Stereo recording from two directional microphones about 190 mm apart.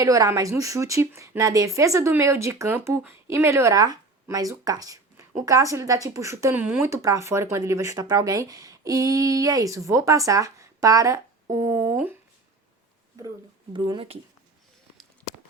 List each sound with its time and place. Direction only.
0.0 s speech: 15° right (ahead or behind)
13.7 s speech: 25° right (ahead or behind)